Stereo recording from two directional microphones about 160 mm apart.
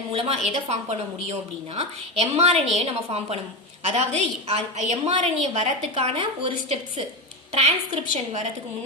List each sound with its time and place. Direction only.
0.1 s a woman's voice: 35° right (ahead or behind)
8.1 s a woman's voice: 45° right (ahead or behind)